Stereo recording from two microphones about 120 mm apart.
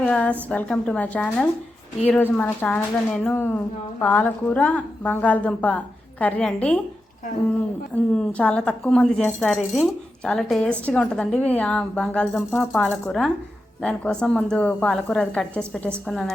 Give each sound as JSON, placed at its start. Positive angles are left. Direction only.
{"t": 0.0, "sound": "speech", "side_deg": 10}
{"t": 8.1, "sound": "speech", "side_deg": 10}